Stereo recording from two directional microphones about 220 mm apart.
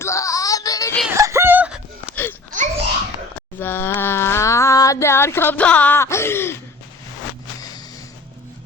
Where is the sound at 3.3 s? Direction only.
10° left (ahead or behind).